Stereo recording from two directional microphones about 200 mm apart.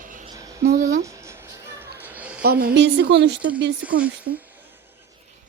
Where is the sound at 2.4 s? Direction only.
50° right (ahead or behind).